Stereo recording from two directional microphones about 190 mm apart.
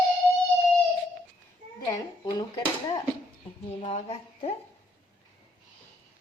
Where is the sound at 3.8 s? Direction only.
35° left (ahead or behind).